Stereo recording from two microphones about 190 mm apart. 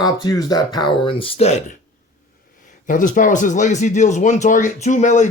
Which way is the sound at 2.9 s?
45° left (ahead or behind).